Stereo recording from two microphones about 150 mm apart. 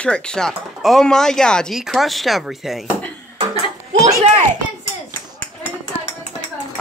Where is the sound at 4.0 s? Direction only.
45° right (ahead or behind).